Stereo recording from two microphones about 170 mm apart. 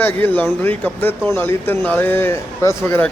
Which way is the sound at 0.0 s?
10° left (ahead or behind).